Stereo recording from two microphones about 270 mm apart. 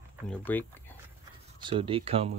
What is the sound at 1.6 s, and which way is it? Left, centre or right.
Speech, centre.